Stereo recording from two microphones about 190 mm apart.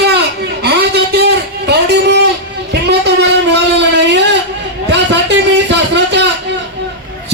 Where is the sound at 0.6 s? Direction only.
60° right (ahead or behind).